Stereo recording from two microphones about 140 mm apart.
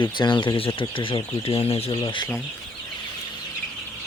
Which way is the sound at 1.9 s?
30° left (ahead or behind).